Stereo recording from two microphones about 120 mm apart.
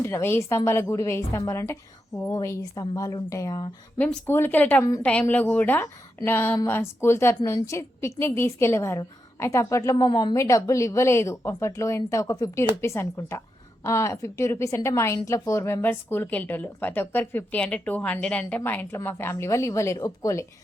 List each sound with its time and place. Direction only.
0.1 s speech: 20° left (ahead or behind)
3.9 s speech: 15° left (ahead or behind); by 10.3 s 35° left (ahead or behind)
10.3 s speech: 25° left (ahead or behind)